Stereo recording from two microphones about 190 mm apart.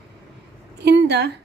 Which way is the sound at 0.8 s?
60° right (ahead or behind).